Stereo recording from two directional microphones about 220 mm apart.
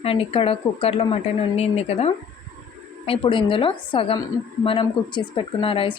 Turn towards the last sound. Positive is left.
turn(degrees=25)  # may be behind; listen again after turning